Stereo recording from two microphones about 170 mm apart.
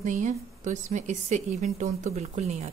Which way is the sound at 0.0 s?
50° right (ahead or behind).